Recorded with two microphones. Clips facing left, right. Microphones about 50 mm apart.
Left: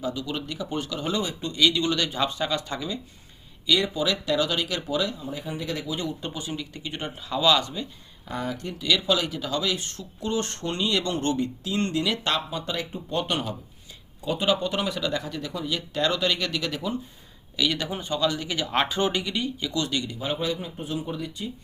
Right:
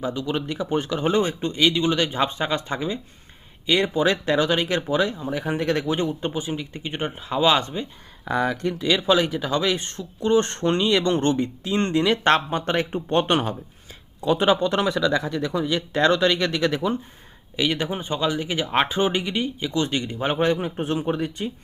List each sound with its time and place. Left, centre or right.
0.0 s speech: right
5.3 s speech: right
6.0 s speech: right
8.2 s speech: right
8.8 s speech: right
14.2 s speech: right
15.2 s speech: right
17.6 s speech: right
20.1 s speech: right